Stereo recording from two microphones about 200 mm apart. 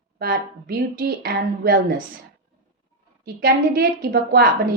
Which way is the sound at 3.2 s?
50° right (ahead or behind).